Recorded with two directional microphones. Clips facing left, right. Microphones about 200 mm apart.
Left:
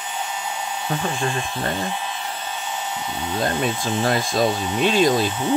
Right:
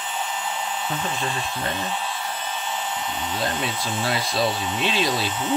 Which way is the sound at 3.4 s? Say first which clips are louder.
Left 6 dB; 50° left (ahead or behind).